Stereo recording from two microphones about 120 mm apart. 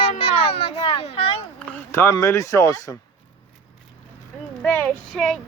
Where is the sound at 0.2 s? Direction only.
55° left (ahead or behind).